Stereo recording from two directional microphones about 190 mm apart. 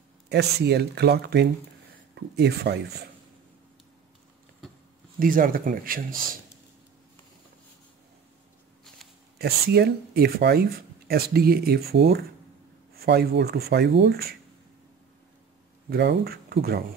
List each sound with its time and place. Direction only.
0.3 s speech: 60° right (ahead or behind)
5.2 s speech: 45° right (ahead or behind)
9.4 s speech: 55° right (ahead or behind)
15.9 s speech: 60° right (ahead or behind)